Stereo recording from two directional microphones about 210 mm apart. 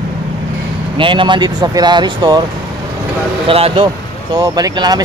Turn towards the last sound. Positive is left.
turn(degrees=-20)  # may be behind; listen again after turning